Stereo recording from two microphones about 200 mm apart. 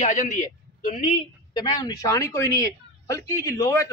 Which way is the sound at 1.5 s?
20° left (ahead or behind).